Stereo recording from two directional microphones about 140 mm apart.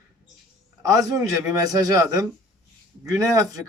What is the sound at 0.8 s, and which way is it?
Speech, 25° right (ahead or behind).